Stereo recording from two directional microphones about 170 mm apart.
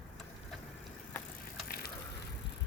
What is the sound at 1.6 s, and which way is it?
Ratchet, 65° left (ahead or behind).